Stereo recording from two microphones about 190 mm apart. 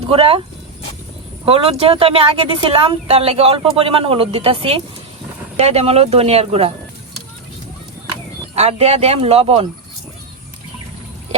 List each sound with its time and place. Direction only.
0.1 s a woman's voice: 30° right (ahead or behind)
1.5 s a woman's voice: 30° right (ahead or behind)
8.5 s speech: 35° right (ahead or behind)